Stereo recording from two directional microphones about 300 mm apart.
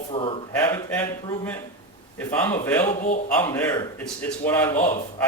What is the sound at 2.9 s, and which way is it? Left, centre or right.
Speech, left.